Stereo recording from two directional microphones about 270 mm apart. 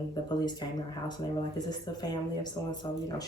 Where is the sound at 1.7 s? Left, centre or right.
Centre.